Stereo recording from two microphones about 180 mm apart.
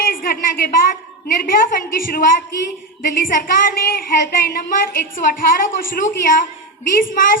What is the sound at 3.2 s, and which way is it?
A woman's voice, 50° left (ahead or behind).